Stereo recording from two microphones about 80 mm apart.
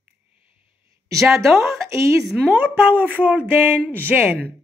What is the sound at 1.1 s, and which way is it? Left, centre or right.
Speech, centre.